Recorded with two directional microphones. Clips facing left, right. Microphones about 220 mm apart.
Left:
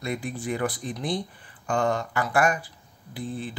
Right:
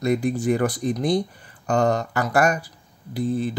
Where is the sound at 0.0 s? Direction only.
40° right (ahead or behind).